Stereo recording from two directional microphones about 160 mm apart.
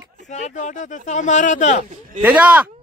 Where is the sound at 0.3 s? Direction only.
50° left (ahead or behind).